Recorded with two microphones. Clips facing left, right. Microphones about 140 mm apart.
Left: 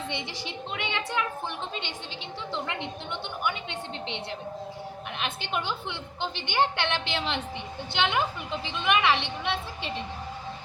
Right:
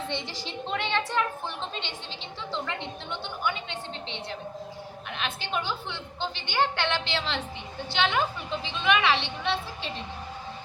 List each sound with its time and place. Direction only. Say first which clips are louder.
0.1 s speech: right 1 dB; 15° left (ahead or behind)
2.5 s a woman's voice: even; 15° left (ahead or behind)